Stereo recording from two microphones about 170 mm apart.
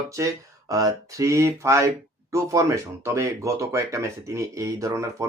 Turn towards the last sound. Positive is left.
turn(degrees=-20)  # may be behind; listen again after turning